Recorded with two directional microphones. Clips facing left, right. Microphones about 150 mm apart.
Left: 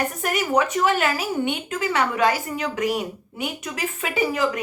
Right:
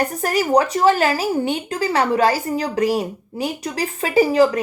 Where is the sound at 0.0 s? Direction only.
35° right (ahead or behind).